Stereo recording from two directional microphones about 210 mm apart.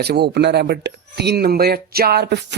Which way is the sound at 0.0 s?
50° right (ahead or behind).